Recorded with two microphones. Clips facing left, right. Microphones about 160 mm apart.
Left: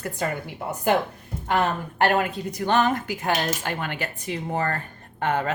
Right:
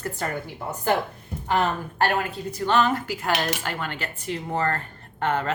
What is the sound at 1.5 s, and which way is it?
A woman's voice, 20° left (ahead or behind).